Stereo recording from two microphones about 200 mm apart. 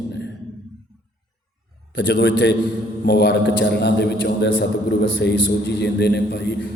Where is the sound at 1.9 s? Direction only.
65° left (ahead or behind).